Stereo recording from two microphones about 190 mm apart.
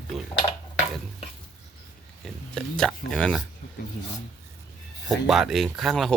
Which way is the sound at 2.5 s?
5° left (ahead or behind).